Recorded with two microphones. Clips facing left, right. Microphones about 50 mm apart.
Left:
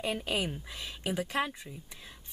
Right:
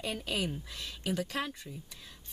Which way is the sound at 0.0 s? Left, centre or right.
Centre.